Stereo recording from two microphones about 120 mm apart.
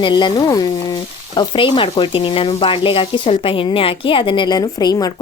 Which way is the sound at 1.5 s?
45° left (ahead or behind).